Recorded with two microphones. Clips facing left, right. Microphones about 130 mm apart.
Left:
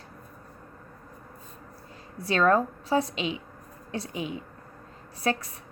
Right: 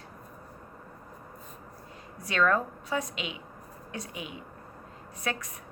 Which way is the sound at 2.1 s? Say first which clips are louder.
Left 4 dB; 30° left (ahead or behind).